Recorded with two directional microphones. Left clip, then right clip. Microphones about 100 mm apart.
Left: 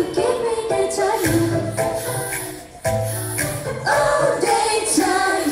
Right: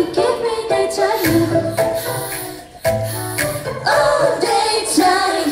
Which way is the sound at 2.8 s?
15° right (ahead or behind).